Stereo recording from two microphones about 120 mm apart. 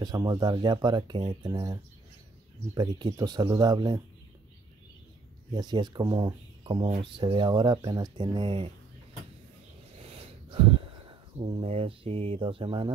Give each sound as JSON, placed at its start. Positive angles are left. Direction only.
{"t": 0.0, "sound": "speech", "side_deg": -35}
{"t": 5.5, "sound": "speech", "side_deg": -35}
{"t": 9.9, "sound": "a sound", "side_deg": -55}